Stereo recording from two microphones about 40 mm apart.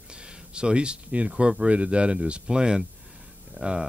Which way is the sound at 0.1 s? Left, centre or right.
Right.